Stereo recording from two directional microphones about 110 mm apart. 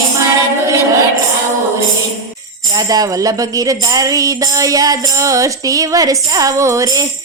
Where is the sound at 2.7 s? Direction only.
35° right (ahead or behind).